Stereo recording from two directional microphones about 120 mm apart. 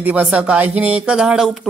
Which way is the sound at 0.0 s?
10° right (ahead or behind).